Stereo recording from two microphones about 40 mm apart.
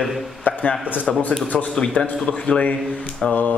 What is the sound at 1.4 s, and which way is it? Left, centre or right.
Speech, left.